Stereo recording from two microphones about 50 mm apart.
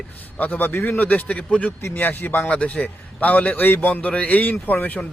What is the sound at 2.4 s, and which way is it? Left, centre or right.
A man's voice, left.